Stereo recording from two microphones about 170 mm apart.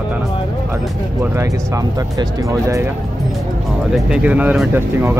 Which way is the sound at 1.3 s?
20° right (ahead or behind).